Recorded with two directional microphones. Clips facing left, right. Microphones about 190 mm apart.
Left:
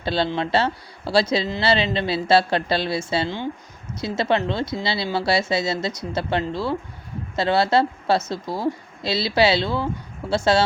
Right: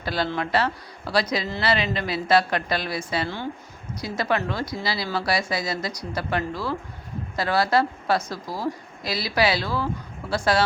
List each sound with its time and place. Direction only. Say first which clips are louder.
0.0 s speech: left 3 dB; 25° left (ahead or behind)